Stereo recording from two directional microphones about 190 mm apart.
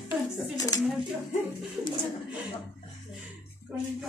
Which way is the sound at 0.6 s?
15° left (ahead or behind).